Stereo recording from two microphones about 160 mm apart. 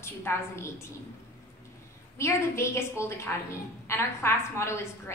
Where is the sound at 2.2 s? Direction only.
15° left (ahead or behind).